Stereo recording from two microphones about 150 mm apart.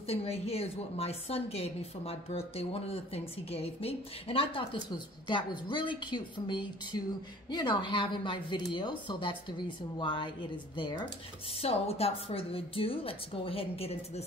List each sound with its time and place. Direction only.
0.0 s a woman's voice: 40° left (ahead or behind)
11.6 s a woman's voice: 40° left (ahead or behind)